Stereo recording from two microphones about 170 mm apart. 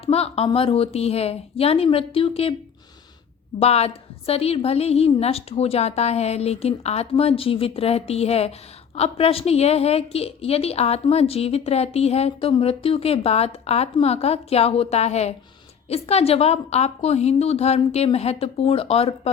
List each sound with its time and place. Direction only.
0.0 s a woman's voice: 35° left (ahead or behind)
3.6 s a woman's voice: 40° left (ahead or behind)